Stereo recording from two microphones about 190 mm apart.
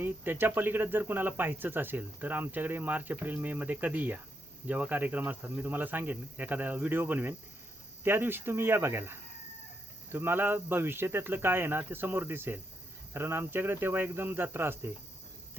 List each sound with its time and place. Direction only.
0.0 s speech: 10° right (ahead or behind)